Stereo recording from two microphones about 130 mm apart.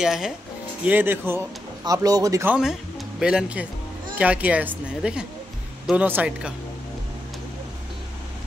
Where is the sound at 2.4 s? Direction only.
5° right (ahead or behind).